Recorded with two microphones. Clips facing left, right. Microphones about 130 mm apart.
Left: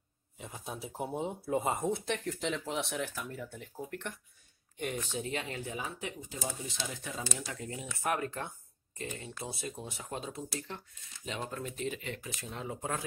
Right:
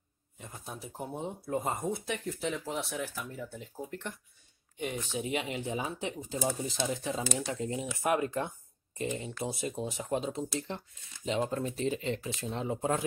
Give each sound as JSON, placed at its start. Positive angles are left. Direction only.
{"t": 0.4, "sound": "speech", "side_deg": 0}
{"t": 4.7, "sound": "speech", "side_deg": -5}